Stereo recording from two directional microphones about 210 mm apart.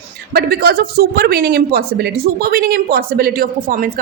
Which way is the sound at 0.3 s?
45° right (ahead or behind).